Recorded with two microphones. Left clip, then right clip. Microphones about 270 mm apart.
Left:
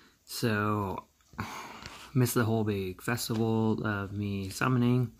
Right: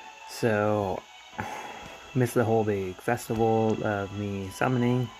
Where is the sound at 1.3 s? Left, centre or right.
Centre.